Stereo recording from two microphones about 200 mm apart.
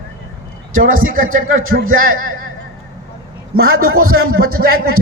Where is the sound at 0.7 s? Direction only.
45° right (ahead or behind).